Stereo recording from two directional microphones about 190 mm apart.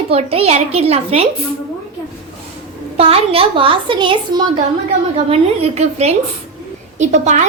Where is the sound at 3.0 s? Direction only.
30° right (ahead or behind).